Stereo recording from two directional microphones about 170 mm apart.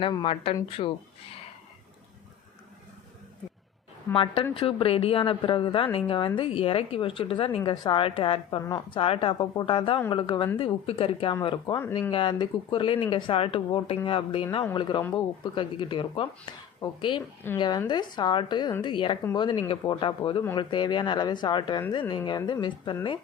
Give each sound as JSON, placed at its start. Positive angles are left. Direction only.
{"t": 0.0, "sound": "a woman's voice", "side_deg": 30}
{"t": 4.1, "sound": "a woman's voice", "side_deg": 30}